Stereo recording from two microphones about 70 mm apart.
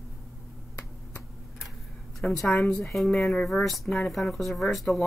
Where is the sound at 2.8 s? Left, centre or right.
Centre.